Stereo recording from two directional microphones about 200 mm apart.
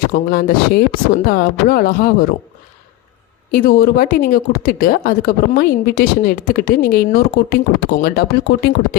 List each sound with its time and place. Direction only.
0.1 s speech: 45° left (ahead or behind)
3.5 s speech: 45° left (ahead or behind)